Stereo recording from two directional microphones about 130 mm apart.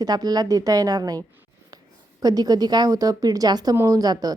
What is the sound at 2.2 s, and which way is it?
A woman's voice, 30° right (ahead or behind).